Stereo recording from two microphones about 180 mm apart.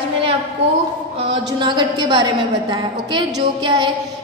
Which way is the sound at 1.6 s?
25° right (ahead or behind).